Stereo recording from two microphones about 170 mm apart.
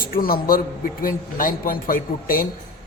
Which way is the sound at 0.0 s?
60° left (ahead or behind).